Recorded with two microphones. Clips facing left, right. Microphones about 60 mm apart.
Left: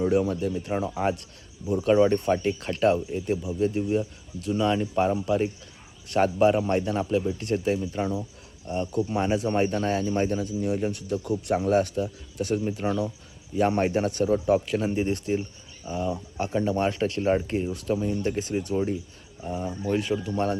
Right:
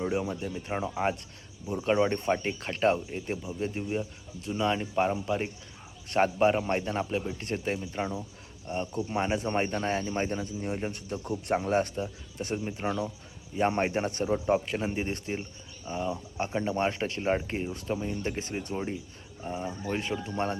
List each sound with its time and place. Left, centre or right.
0.0 s speech: centre
2.1 s speech: right
7.3 s speech: right
7.8 s speech: centre
8.6 s speech: right
12.8 s speech: centre
13.6 s speech: right
14.8 s speech: centre
18.7 s speech: centre
19.9 s speech: right